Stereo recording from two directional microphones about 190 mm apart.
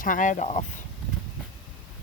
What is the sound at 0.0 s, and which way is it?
Speech, 45° left (ahead or behind).